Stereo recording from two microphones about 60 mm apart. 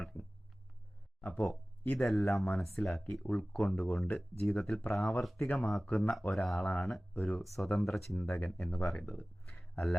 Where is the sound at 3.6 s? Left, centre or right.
Centre.